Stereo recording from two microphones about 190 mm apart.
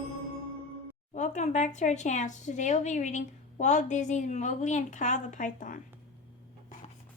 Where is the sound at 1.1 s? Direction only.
40° left (ahead or behind).